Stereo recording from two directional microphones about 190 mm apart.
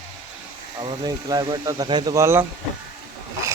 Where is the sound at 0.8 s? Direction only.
25° right (ahead or behind).